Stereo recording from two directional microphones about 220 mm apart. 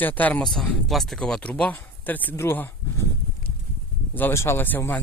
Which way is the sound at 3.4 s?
40° right (ahead or behind).